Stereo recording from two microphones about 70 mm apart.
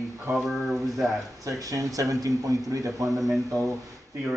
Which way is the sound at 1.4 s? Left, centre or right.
Right.